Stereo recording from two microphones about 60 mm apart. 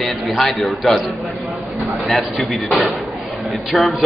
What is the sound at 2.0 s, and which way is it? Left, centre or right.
Speech, centre.